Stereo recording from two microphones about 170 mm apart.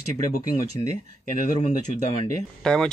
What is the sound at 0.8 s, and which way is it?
Speech, 25° left (ahead or behind).